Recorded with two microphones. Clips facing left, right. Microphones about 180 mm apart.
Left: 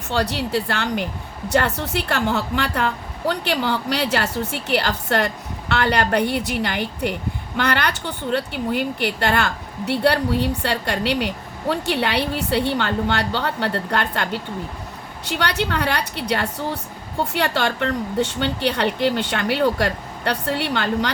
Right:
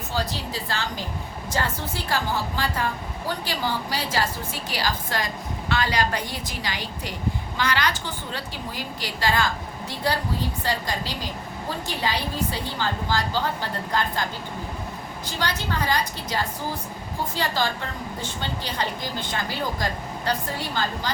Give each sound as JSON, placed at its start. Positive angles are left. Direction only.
{"t": 0.1, "sound": "a woman's voice", "side_deg": 70}